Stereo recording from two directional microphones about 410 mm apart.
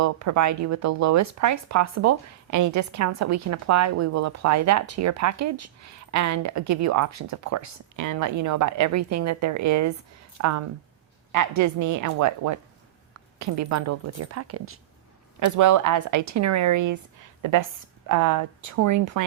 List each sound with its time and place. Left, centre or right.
0.0 s speech: right
15.4 s a woman's voice: right